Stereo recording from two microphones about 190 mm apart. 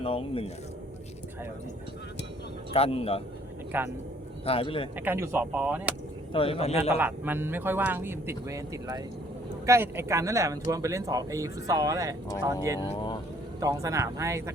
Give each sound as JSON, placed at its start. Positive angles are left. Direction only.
{"t": 0.0, "sound": "speech", "side_deg": 30}
{"t": 2.7, "sound": "a man's voice", "side_deg": 30}
{"t": 3.7, "sound": "speech", "side_deg": -10}
{"t": 4.4, "sound": "speech", "side_deg": 30}
{"t": 4.9, "sound": "speech", "side_deg": -10}
{"t": 6.3, "sound": "a man's voice", "side_deg": 30}
{"t": 7.0, "sound": "speech", "side_deg": -10}
{"t": 12.9, "sound": "speech", "side_deg": 25}
{"t": 13.6, "sound": "speech", "side_deg": -20}